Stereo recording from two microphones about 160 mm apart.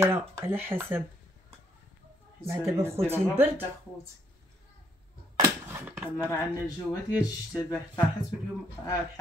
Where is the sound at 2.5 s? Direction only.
15° right (ahead or behind).